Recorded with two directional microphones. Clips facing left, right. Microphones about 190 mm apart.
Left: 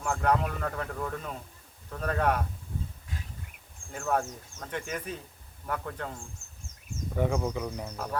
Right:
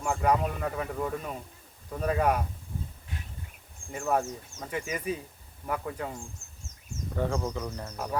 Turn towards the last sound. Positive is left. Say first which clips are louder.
# left 1 dB
turn(degrees=10)  # may be behind; listen again after turning